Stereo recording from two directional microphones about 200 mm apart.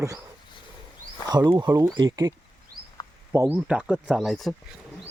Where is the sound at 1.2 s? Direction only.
20° right (ahead or behind); by 4.6 s centre (ahead or behind).